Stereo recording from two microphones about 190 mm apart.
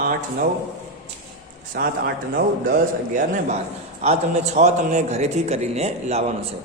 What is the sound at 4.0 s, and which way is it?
A man's voice, 35° right (ahead or behind).